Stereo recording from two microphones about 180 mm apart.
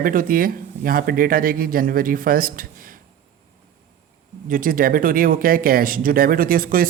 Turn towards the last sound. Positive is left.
turn(degrees=-50)  # may be behind; listen again after turning